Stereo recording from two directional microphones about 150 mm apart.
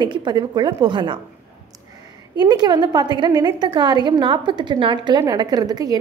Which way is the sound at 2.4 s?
30° right (ahead or behind).